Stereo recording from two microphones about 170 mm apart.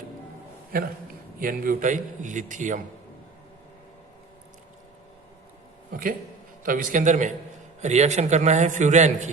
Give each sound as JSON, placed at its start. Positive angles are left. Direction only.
{"t": 1.4, "sound": "a man's voice", "side_deg": -55}
{"t": 5.9, "sound": "a man's voice", "side_deg": -55}